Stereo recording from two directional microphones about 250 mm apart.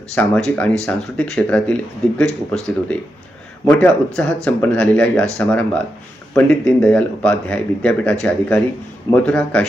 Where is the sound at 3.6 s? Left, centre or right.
Centre.